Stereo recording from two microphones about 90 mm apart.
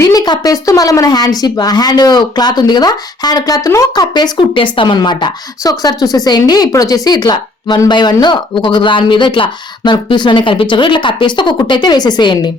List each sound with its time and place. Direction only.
0.0 s speech: 45° left (ahead or behind)
4.0 s speech: 55° left (ahead or behind)